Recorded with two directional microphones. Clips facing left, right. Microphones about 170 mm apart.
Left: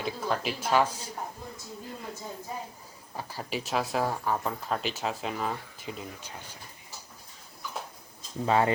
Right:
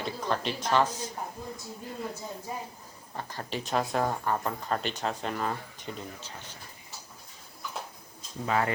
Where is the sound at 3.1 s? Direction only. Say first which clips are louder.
Left 1 dB; 10° left (ahead or behind).